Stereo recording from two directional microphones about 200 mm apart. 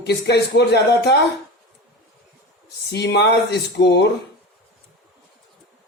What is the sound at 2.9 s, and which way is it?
Speech, 60° left (ahead or behind).